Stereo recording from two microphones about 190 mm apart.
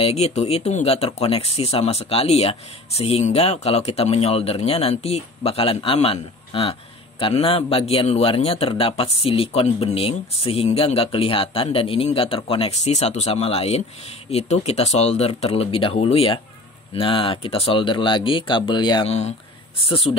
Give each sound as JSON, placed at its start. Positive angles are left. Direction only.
{"t": 0.0, "sound": "speech", "side_deg": 35}